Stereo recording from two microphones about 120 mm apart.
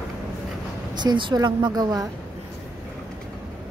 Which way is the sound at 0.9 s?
40° right (ahead or behind).